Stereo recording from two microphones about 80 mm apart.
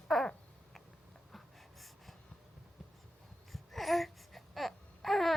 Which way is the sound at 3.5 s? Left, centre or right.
Centre.